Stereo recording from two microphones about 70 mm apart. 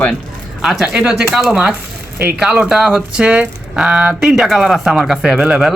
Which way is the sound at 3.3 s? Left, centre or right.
Centre.